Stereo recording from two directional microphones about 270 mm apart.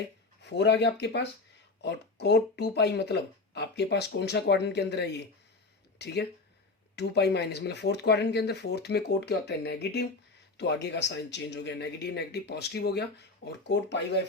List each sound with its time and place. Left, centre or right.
0.0 s speech: left